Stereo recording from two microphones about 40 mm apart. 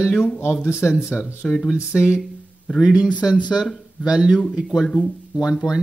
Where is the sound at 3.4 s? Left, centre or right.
Left.